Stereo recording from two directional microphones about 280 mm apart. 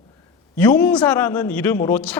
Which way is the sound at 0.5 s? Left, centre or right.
Centre.